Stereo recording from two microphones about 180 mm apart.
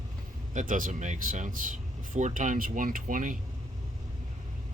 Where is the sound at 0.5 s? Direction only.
45° right (ahead or behind).